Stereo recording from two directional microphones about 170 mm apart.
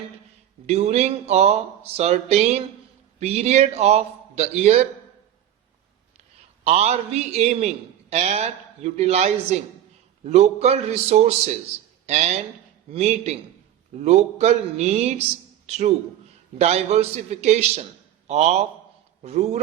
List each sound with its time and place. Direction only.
0.7 s speech: 40° right (ahead or behind)
6.7 s speech: 40° right (ahead or behind)
16.6 s speech: 40° right (ahead or behind)